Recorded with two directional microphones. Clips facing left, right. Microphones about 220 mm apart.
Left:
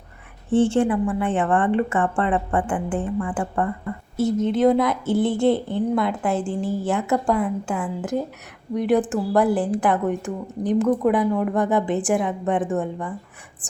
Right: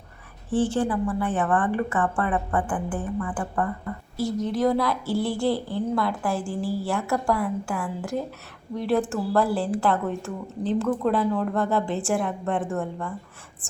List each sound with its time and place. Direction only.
0.5 s a woman's voice: 25° left (ahead or behind)